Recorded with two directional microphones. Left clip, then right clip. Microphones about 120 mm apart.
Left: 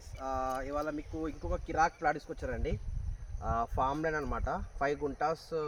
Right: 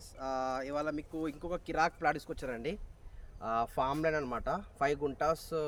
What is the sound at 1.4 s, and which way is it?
Speech, 40° right (ahead or behind).